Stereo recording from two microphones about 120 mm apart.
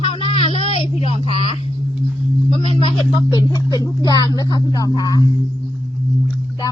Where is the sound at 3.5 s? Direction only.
35° left (ahead or behind).